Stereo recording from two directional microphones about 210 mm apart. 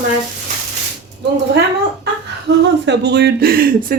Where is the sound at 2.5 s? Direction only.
55° right (ahead or behind).